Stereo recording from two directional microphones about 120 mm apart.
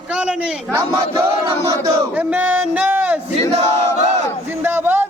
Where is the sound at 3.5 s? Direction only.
70° right (ahead or behind).